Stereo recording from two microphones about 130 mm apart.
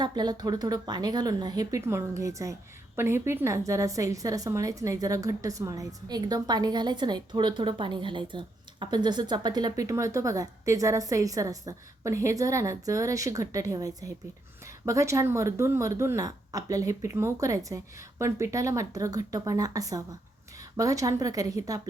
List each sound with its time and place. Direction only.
0.0 s speech: 30° right (ahead or behind)